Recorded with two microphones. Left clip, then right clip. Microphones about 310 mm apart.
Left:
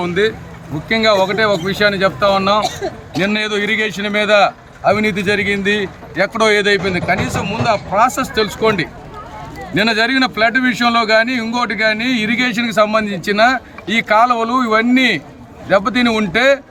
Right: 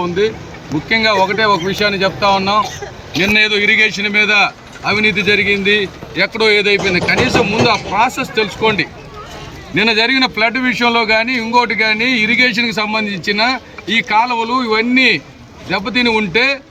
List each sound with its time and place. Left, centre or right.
0.9 s a man's voice: centre